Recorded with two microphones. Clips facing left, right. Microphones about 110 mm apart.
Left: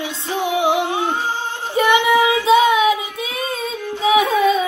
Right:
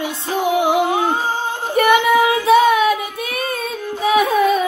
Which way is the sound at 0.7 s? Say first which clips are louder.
Right 3 dB; 45° right (ahead or behind).